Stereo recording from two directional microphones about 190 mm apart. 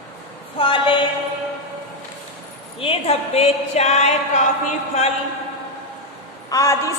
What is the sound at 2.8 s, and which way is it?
Speech, 30° left (ahead or behind).